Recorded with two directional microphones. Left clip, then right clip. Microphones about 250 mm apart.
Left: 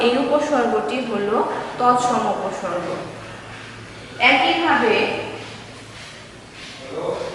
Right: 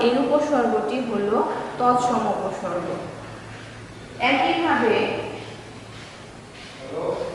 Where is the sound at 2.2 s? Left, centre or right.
Centre.